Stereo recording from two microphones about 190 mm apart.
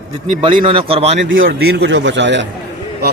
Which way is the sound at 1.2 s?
85° right.